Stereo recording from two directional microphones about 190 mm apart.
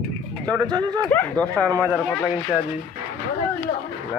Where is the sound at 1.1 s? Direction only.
10° left (ahead or behind).